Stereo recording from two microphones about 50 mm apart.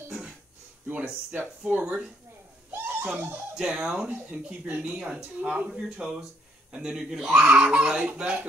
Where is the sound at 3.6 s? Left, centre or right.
Centre.